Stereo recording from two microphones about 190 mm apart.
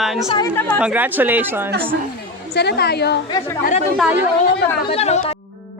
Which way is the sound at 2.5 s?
60° left (ahead or behind).